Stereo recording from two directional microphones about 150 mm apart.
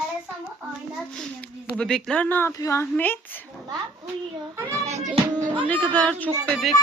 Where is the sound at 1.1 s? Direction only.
5° left (ahead or behind).